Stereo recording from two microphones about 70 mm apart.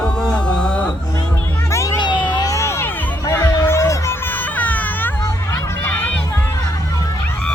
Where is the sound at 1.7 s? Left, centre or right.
Left.